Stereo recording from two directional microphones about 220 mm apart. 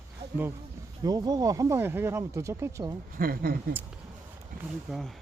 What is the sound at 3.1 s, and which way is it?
Speech, 40° right (ahead or behind).